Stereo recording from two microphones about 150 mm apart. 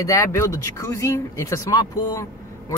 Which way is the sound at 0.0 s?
20° left (ahead or behind).